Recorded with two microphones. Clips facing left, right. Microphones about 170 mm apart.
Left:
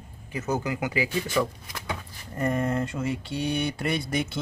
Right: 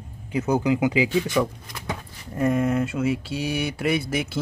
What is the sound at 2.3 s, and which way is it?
Speech, 5° right (ahead or behind).